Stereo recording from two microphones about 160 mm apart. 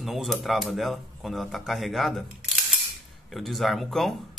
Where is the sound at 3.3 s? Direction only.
Centre (ahead or behind).